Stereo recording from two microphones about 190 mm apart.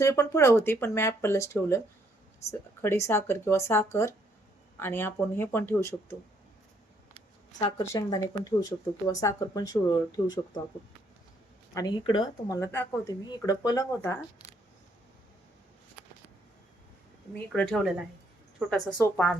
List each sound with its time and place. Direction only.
0.0 s speech: 15° left (ahead or behind)
7.8 s speech: 20° left (ahead or behind)
11.7 s speech: 20° left (ahead or behind)
17.3 s speech: 5° left (ahead or behind)